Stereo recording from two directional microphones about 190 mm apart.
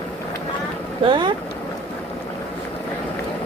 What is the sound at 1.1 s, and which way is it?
Speech, 25° right (ahead or behind).